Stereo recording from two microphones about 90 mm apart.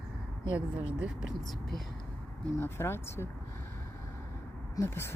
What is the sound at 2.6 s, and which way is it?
Speech, 30° left (ahead or behind).